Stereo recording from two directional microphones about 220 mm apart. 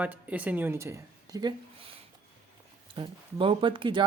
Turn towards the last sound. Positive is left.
turn(degrees=-20)  # may be behind; listen again after turning